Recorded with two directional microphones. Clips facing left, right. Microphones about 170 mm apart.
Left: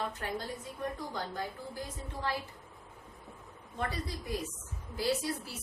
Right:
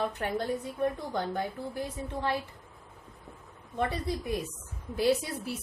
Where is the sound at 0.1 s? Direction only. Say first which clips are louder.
Right 7 dB; 65° right (ahead or behind).